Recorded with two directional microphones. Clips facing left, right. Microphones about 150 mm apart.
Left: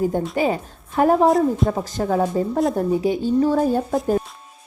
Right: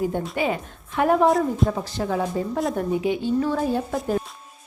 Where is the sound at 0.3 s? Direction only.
40° left (ahead or behind).